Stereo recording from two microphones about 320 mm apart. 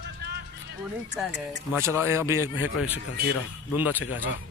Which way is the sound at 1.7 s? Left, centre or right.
Centre.